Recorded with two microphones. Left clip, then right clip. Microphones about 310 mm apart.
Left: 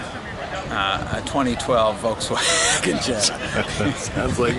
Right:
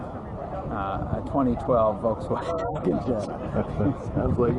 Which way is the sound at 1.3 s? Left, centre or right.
Centre.